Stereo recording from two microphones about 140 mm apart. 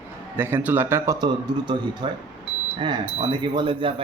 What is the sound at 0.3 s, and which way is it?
A man's voice, 15° right (ahead or behind).